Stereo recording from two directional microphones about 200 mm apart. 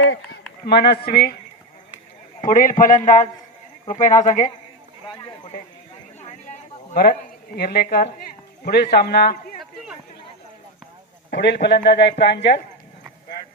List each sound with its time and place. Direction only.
0.6 s speech: 55° left (ahead or behind)
2.4 s a man's voice: 40° left (ahead or behind)
5.0 s speech: 25° left (ahead or behind)
6.1 s a sound: 35° left (ahead or behind)
6.9 s speech: 50° left (ahead or behind)
11.3 s a man's voice: 55° left (ahead or behind)